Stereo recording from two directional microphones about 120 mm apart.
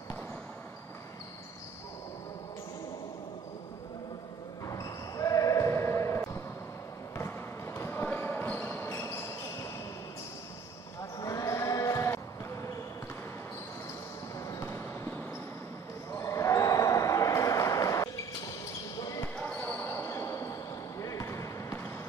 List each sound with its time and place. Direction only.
4.6 s basketball bounce: 25° left (ahead or behind)
11.0 s basketball bounce: 25° left (ahead or behind)
14.4 s basketball bounce: 25° left (ahead or behind)
19.3 s basketball bounce: 15° left (ahead or behind)